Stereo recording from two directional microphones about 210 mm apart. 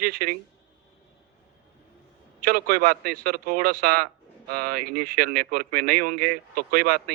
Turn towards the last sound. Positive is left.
turn(degrees=-45)  # may be behind; listen again after turning